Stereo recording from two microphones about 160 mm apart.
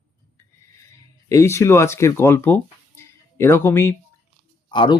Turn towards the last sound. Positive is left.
turn(degrees=30)  # may be behind; listen again after turning